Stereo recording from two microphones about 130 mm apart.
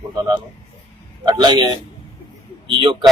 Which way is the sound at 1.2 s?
35° right (ahead or behind).